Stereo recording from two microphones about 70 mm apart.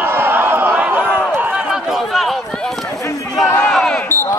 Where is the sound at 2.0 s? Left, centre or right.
Centre.